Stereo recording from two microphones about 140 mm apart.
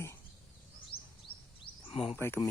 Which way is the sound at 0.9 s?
40° left (ahead or behind).